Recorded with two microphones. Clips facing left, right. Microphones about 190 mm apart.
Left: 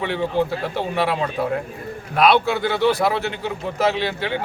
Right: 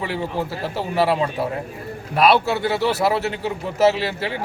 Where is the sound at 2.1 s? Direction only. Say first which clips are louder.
Even; 5° right (ahead or behind).